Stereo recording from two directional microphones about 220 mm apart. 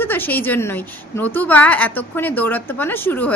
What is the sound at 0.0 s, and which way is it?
A woman's voice, 10° left (ahead or behind).